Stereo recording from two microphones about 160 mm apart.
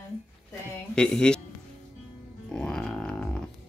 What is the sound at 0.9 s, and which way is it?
Speech, 5° left (ahead or behind).